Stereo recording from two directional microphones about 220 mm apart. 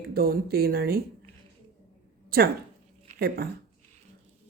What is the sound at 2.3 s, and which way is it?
Speech, 45° right (ahead or behind).